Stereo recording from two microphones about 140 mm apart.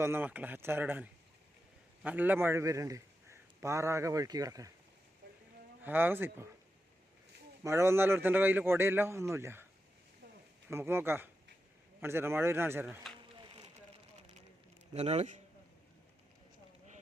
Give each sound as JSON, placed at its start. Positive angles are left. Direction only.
{"t": 0.0, "sound": "a man's voice", "side_deg": -15}
{"t": 5.8, "sound": "a man's voice", "side_deg": -15}
{"t": 7.6, "sound": "a man's voice", "side_deg": -20}
{"t": 10.7, "sound": "a man's voice", "side_deg": -15}
{"t": 14.9, "sound": "speech", "side_deg": -50}